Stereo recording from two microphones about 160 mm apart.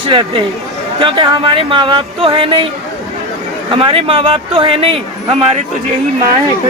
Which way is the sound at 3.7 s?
35° right (ahead or behind).